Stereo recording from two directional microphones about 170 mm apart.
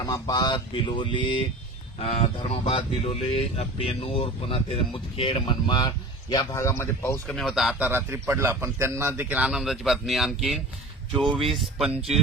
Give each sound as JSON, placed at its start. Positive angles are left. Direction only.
{"t": 0.0, "sound": "speech", "side_deg": 25}
{"t": 2.0, "sound": "speech", "side_deg": 40}
{"t": 7.3, "sound": "a man's voice", "side_deg": 0}